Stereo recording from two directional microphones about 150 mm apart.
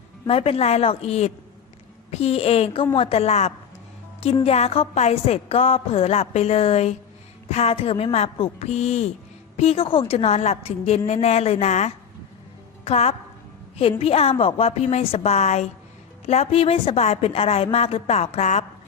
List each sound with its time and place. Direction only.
0.3 s a woman's voice: 40° left (ahead or behind)